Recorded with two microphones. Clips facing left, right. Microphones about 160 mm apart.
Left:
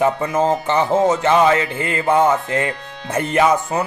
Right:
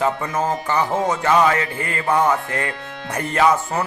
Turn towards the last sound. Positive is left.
turn(degrees=20)  # may be behind; listen again after turning